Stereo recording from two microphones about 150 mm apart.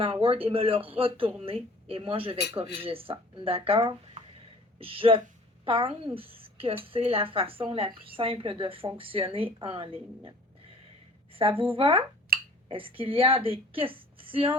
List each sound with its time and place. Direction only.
0.0 s a woman's voice: 35° right (ahead or behind)